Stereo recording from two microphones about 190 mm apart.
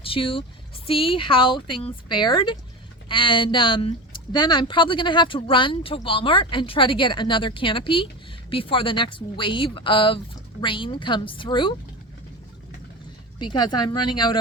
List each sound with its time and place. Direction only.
0.0 s speech: 30° left (ahead or behind)
13.4 s speech: 25° left (ahead or behind)